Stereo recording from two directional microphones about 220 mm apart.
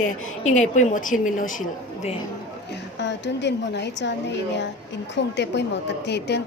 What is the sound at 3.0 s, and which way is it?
Speech, 50° left (ahead or behind).